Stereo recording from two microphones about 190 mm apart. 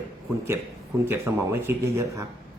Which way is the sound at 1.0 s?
15° right (ahead or behind).